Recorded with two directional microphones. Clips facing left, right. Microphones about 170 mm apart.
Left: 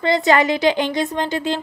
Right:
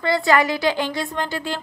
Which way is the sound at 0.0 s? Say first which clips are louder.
Left 2 dB; 20° left (ahead or behind).